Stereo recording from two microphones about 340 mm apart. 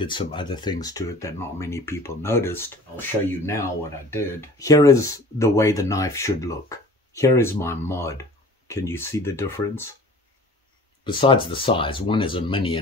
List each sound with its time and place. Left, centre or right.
0.0 s speech: centre
11.1 s speech: centre